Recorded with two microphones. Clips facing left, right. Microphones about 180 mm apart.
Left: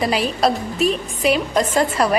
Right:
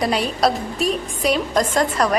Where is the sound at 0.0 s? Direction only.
Centre (ahead or behind).